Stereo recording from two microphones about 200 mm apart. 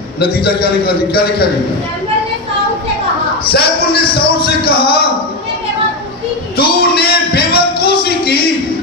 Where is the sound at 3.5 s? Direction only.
50° left (ahead or behind).